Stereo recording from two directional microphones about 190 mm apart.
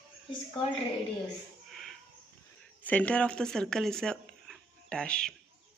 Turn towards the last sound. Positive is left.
turn(degrees=5)  # may be behind; listen again after turning